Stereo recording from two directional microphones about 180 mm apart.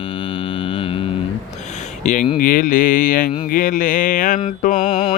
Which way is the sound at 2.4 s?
50° left (ahead or behind).